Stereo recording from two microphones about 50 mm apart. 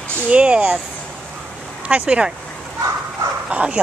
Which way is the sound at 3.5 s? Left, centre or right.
Right.